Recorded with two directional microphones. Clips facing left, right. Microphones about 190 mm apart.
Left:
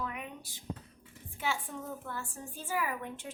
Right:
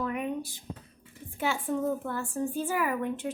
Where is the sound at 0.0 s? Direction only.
50° right (ahead or behind).